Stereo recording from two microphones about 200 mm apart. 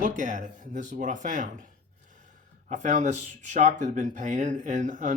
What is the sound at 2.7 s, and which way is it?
Speech, 40° right (ahead or behind).